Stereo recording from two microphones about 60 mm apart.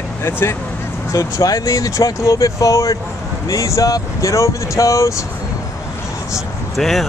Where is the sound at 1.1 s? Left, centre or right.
Left.